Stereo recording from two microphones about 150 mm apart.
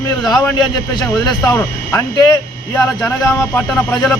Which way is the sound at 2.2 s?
25° left (ahead or behind).